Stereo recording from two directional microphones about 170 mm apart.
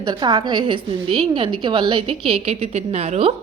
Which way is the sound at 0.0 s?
25° right (ahead or behind).